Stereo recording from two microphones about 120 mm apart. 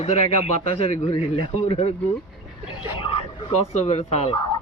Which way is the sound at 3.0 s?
50° left (ahead or behind).